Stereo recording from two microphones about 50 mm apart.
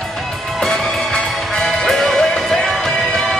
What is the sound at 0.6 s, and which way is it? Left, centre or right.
Music, centre.